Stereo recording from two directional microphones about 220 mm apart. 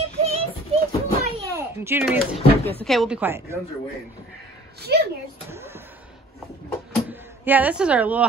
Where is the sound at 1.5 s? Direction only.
10° right (ahead or behind).